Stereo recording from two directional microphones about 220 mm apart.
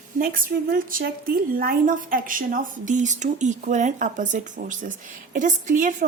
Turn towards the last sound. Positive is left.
turn(degrees=-35)  # may be behind; listen again after turning